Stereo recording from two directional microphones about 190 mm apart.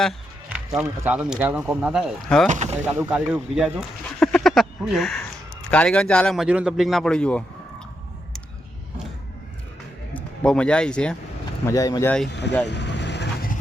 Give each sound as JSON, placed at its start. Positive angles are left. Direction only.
{"t": 0.0, "sound": "music", "side_deg": 0}
{"t": 0.7, "sound": "speech", "side_deg": -10}
{"t": 2.5, "sound": "speech", "side_deg": -40}
{"t": 2.8, "sound": "speech", "side_deg": -5}
{"t": 10.2, "sound": "a man's voice", "side_deg": 5}
{"t": 11.6, "sound": "speech", "side_deg": 15}
{"t": 12.3, "sound": "speech", "side_deg": 65}
{"t": 12.6, "sound": "vehicle", "side_deg": 65}